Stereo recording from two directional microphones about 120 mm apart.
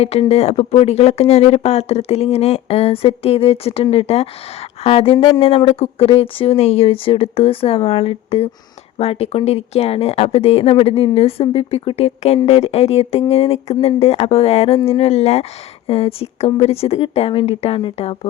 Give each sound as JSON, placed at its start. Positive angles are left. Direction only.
{"t": 0.0, "sound": "speech", "side_deg": 60}